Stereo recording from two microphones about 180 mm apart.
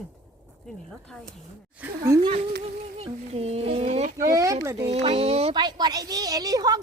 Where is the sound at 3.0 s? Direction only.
35° right (ahead or behind).